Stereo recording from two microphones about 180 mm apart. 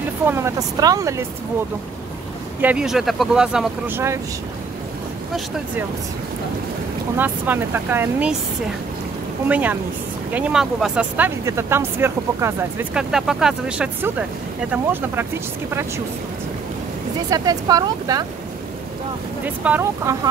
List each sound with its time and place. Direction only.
0.3 s speech: 15° right (ahead or behind)
2.6 s speech: 5° right (ahead or behind)
7.2 s speech: 10° right (ahead or behind)
9.5 s speech: 10° right (ahead or behind)
12.9 s speech: 5° right (ahead or behind)
17.3 s speech: 20° right (ahead or behind)
19.4 s speech: 10° right (ahead or behind)